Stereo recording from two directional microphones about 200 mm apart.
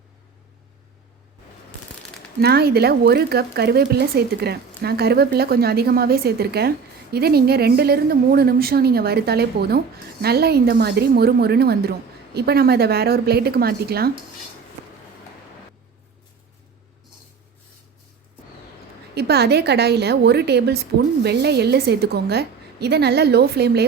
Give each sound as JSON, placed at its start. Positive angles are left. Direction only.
{"t": 2.4, "sound": "speech", "side_deg": -50}
{"t": 19.1, "sound": "a woman's voice", "side_deg": -55}